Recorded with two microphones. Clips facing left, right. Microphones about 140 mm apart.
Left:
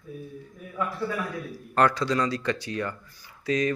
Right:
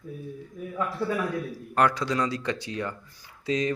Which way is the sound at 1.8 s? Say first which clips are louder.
Left 1 dB; 10° right (ahead or behind).